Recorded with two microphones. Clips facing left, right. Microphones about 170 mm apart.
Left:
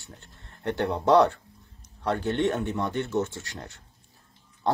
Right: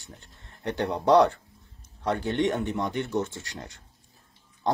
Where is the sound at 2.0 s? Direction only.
15° right (ahead or behind).